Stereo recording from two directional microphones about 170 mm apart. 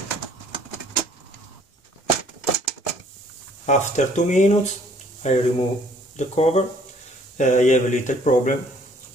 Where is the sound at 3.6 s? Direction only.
45° left (ahead or behind).